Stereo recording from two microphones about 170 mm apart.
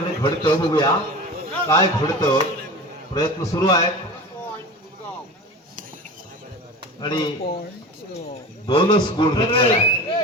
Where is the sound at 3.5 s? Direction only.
20° left (ahead or behind).